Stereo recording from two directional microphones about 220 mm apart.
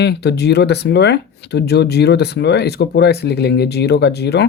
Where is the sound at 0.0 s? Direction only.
50° left (ahead or behind).